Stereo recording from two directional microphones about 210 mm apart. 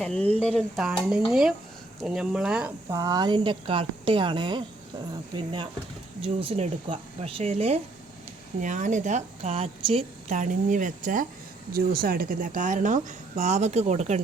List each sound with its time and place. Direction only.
0.0 s a woman's voice: 5° left (ahead or behind); by 14.2 s 35° right (ahead or behind)